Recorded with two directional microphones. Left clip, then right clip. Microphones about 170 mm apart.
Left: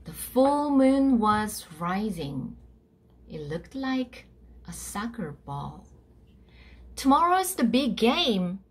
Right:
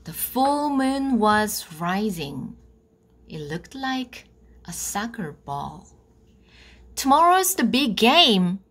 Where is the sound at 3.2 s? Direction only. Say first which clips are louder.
Right 2 dB; 45° right (ahead or behind).